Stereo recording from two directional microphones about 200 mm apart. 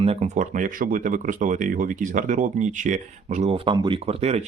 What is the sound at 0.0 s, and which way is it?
Speech, 30° right (ahead or behind).